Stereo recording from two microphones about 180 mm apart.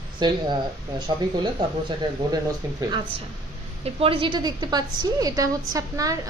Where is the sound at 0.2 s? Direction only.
25° right (ahead or behind).